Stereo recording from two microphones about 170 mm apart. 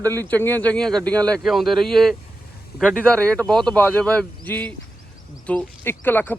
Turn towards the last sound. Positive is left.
turn(degrees=10)  # may be behind; listen again after turning